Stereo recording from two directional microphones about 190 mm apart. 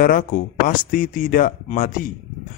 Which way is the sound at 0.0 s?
45° left (ahead or behind).